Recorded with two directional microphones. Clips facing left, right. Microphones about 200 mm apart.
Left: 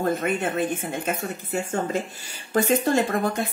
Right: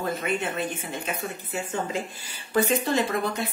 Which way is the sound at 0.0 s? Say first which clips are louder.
Left 4 dB; 50° left (ahead or behind).